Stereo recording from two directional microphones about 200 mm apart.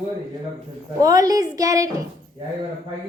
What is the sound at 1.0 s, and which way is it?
Speech, 15° right (ahead or behind).